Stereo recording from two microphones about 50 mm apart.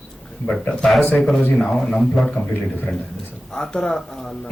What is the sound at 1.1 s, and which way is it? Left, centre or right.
A man's voice, centre.